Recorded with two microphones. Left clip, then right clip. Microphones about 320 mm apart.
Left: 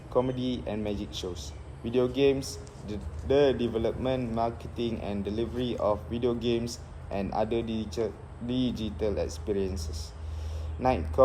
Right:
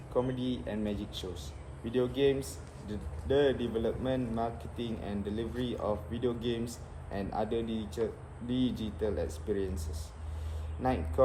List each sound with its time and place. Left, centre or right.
0.1 s a man's voice: centre